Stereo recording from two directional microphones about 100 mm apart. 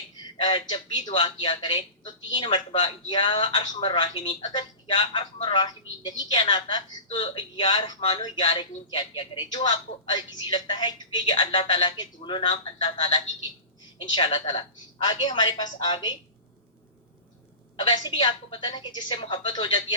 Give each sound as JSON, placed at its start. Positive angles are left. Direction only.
{"t": 0.3, "sound": "speech", "side_deg": 50}
{"t": 4.4, "sound": "a woman's voice", "side_deg": 55}
{"t": 8.4, "sound": "a woman's voice", "side_deg": 65}
{"t": 14.3, "sound": "a woman's voice", "side_deg": 60}
{"t": 17.7, "sound": "a woman's voice", "side_deg": 45}